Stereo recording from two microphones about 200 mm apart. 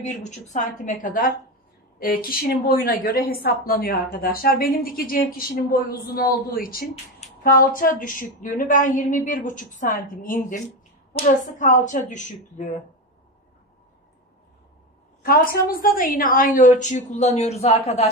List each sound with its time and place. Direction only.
0.0 s a woman's voice: 35° left (ahead or behind)
15.2 s a woman's voice: 45° left (ahead or behind)